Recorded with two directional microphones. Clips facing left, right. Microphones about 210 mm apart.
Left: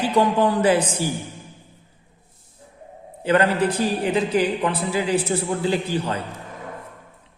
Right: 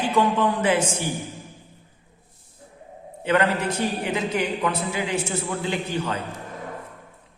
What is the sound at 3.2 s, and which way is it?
Speech, 30° left (ahead or behind).